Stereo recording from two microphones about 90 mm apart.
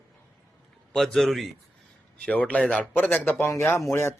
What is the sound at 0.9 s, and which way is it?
Speech, 5° left (ahead or behind).